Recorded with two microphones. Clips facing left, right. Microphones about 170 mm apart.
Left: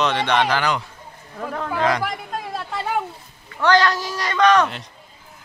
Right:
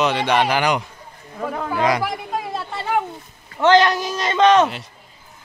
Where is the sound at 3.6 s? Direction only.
20° right (ahead or behind).